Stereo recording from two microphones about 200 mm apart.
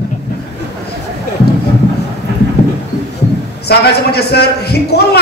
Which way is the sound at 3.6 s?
55° left (ahead or behind).